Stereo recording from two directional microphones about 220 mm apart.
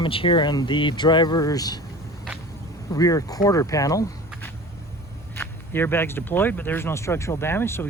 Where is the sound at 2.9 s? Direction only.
15° left (ahead or behind).